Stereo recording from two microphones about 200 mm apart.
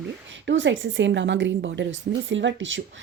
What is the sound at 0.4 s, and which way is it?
A woman's voice, 65° right (ahead or behind).